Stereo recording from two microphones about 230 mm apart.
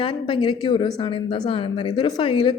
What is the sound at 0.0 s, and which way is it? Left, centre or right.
Speech, left.